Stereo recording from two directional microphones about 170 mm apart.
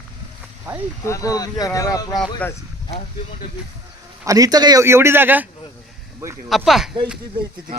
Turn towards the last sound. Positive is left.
turn(degrees=0)  # may be behind; listen again after turning